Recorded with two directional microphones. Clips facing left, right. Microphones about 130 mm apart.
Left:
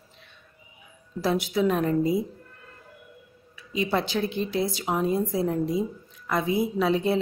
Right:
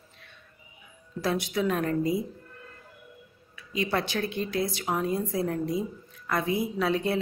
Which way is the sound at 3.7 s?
20° left (ahead or behind).